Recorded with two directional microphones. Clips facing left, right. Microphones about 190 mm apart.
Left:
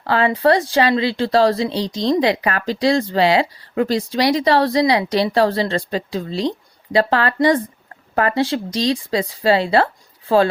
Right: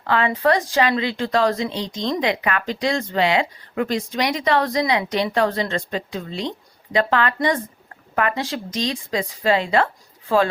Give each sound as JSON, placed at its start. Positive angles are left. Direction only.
{"t": 0.0, "sound": "speech", "side_deg": 35}